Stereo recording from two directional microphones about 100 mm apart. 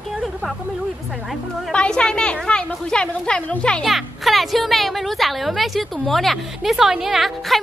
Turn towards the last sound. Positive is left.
turn(degrees=0)  # may be behind; listen again after turning